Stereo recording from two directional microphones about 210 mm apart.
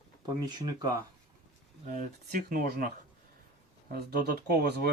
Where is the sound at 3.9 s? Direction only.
50° right (ahead or behind).